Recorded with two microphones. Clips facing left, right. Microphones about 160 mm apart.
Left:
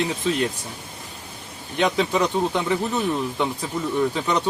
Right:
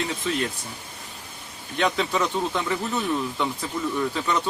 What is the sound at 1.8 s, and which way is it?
Speech, 15° left (ahead or behind).